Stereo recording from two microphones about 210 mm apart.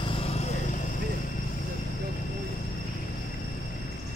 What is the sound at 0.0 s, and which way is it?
Vehicle, 25° left (ahead or behind).